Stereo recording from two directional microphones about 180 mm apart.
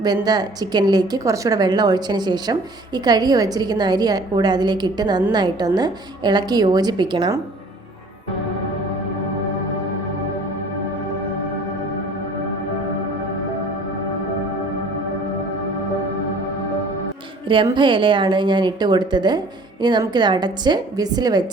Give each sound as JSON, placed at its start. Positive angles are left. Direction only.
{"t": 0.0, "sound": "a woman's voice", "side_deg": -20}
{"t": 17.7, "sound": "a woman's voice", "side_deg": -25}